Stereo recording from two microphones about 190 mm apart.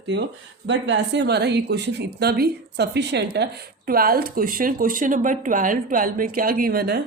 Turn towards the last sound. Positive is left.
turn(degrees=-55)  # may be behind; listen again after turning